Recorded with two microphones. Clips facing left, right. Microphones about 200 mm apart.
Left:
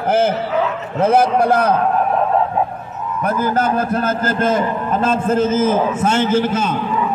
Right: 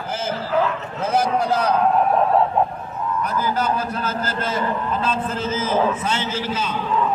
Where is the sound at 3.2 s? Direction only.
50° left (ahead or behind).